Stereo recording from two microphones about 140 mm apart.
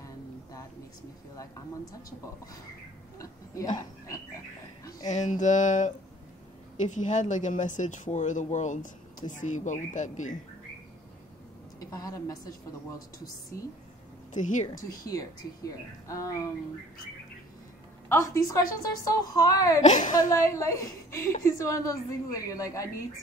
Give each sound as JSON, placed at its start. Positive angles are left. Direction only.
{"t": 0.0, "sound": "a sound", "side_deg": 25}
{"t": 1.3, "sound": "a woman's voice", "side_deg": 25}
{"t": 5.0, "sound": "speech", "side_deg": 60}
{"t": 11.8, "sound": "a woman's voice", "side_deg": 25}
{"t": 14.3, "sound": "speech", "side_deg": 60}
{"t": 15.0, "sound": "a woman's voice", "side_deg": 25}
{"t": 18.0, "sound": "a woman's voice", "side_deg": 20}
{"t": 19.8, "sound": "speech", "side_deg": 60}
{"t": 20.2, "sound": "a woman's voice", "side_deg": 20}